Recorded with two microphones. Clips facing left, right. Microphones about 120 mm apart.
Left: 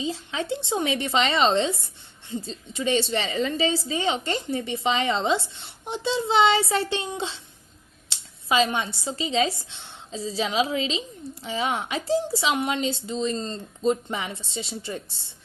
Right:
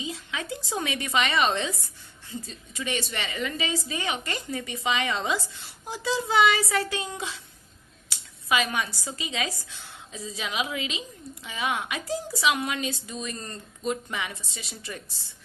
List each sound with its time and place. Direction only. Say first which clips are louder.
0.0 s a woman's voice: left 5 dB; 30° left (ahead or behind)